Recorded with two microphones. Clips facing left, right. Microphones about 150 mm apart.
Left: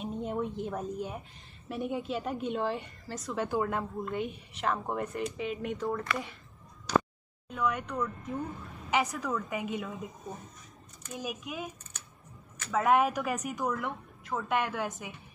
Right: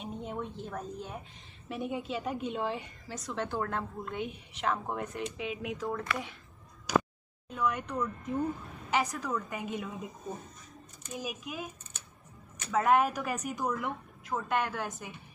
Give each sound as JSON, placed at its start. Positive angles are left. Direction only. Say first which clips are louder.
{"t": 0.0, "sound": "a sound", "louder": "left 4 dB", "side_deg": 0}
{"t": 0.6, "sound": "speech", "louder": "left 5 dB", "side_deg": 15}
{"t": 1.7, "sound": "a woman's voice", "louder": "left 2 dB", "side_deg": 0}
{"t": 6.9, "sound": "a sound", "louder": "even", "side_deg": -10}
{"t": 7.5, "sound": "a woman's voice", "louder": "even", "side_deg": 0}
{"t": 11.1, "sound": "a woman's voice", "louder": "left 1 dB", "side_deg": 0}
{"t": 12.7, "sound": "a woman's voice", "louder": "even", "side_deg": 0}